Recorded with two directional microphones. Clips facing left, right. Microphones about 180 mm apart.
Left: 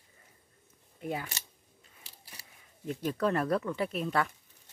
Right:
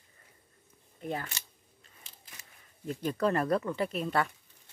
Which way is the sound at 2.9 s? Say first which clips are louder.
Right 1 dB; centre (ahead or behind).